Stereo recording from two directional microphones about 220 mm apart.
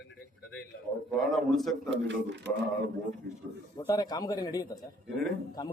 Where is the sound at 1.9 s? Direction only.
55° right (ahead or behind).